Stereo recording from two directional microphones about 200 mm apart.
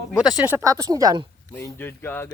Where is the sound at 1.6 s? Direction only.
10° left (ahead or behind).